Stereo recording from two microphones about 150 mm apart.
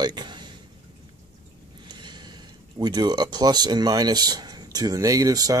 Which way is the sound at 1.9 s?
30° right (ahead or behind).